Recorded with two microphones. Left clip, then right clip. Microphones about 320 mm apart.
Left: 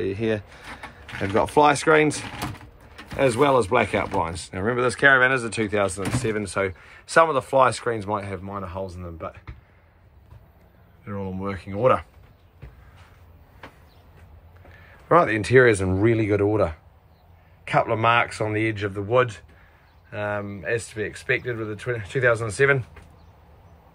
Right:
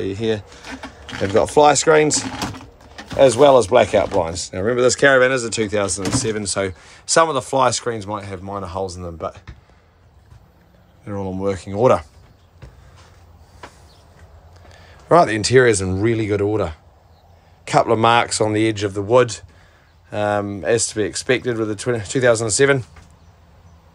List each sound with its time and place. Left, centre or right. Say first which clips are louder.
0.0 s speech: right 3 dB; centre
3.4 s speech: right 8 dB; centre
11.1 s speech: right 8 dB; centre
14.7 s speech: right 4 dB; centre